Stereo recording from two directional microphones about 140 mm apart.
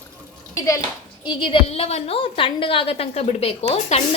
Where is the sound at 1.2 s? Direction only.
35° left (ahead or behind).